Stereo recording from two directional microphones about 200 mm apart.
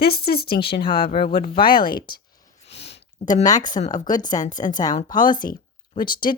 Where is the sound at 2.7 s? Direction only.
30° left (ahead or behind).